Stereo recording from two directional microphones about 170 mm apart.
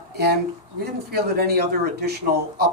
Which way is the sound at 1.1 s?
65° right (ahead or behind).